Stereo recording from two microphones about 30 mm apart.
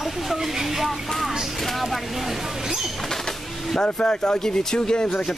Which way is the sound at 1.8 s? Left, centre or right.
Centre.